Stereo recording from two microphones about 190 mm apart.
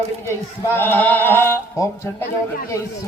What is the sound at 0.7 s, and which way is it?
Speech, 10° left (ahead or behind).